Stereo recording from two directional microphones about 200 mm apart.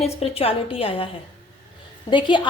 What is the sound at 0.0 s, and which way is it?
A woman's voice, 30° left (ahead or behind).